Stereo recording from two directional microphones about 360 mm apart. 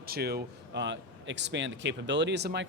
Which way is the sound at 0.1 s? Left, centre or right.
Right.